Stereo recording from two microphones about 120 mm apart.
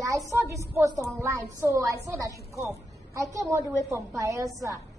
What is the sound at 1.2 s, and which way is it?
A woman's voice, 25° right (ahead or behind).